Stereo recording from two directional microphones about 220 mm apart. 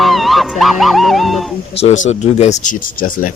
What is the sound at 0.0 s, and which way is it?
Music, centre (ahead or behind).